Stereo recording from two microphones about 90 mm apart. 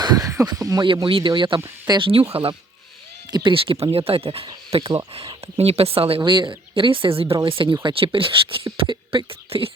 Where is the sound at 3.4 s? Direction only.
80° right.